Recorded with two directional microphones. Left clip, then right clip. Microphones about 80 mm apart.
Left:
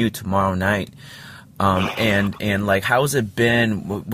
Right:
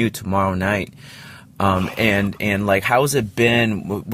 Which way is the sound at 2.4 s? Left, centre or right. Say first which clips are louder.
Right 4 dB; right.